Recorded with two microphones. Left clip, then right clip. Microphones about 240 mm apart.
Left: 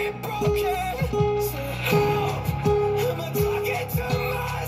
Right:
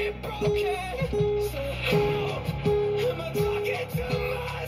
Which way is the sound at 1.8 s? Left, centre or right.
Left.